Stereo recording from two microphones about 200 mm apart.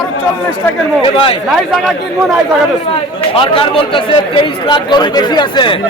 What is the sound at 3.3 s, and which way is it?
Speech, 25° left (ahead or behind).